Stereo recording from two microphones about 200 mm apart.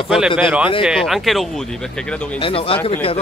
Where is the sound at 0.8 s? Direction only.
Centre (ahead or behind).